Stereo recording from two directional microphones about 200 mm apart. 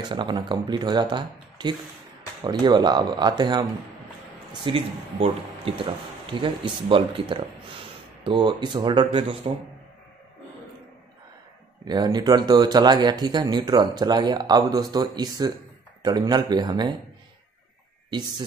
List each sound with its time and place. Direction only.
0.1 s speech: 25° right (ahead or behind)
11.8 s speech: 20° right (ahead or behind)